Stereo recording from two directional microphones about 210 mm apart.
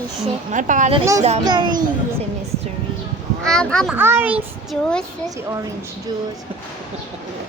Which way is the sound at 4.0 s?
10° right (ahead or behind).